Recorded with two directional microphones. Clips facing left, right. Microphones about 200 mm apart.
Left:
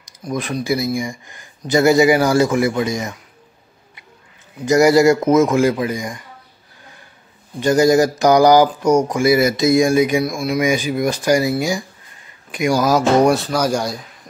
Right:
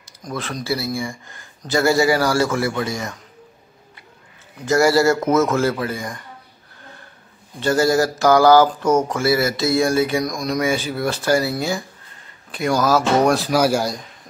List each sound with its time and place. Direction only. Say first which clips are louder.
0.0 s speech: left 5 dB; 15° left (ahead or behind)
4.6 s speech: left 4 dB; 20° left (ahead or behind)
7.6 s speech: left 4 dB; 15° left (ahead or behind)
13.3 s speech: even; 5° right (ahead or behind)